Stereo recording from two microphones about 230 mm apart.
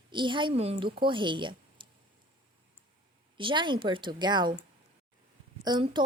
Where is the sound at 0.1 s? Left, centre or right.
Right.